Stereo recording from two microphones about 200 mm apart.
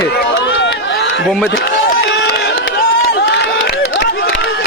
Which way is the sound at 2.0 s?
55° left (ahead or behind).